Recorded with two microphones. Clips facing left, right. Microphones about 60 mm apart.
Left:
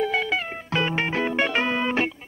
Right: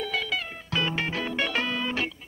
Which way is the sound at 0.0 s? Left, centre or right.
Left.